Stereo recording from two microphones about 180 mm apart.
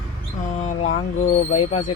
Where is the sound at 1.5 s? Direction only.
35° left (ahead or behind).